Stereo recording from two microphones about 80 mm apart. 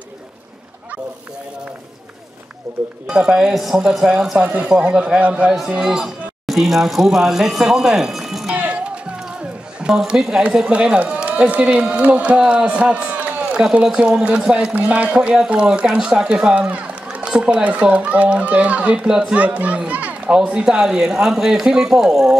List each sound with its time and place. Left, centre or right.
3.1 s speech: centre
5.7 s speech: centre
8.5 s music: centre
9.8 s a man's voice: centre